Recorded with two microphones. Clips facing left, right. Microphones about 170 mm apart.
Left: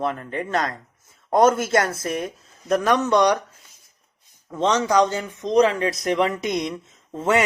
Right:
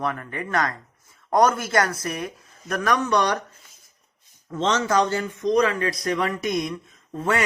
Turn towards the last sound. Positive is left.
turn(degrees=20)  # may be behind; listen again after turning